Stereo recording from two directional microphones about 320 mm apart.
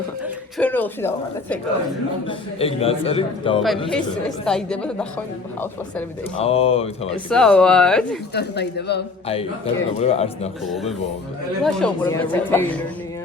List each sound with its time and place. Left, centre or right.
0.6 s speech: centre
2.2 s a man's voice: centre
4.4 s speech: centre
6.4 s a man's voice: centre
7.1 s speech: centre
8.3 s speech: left
9.2 s a man's voice: centre
11.6 s speech: centre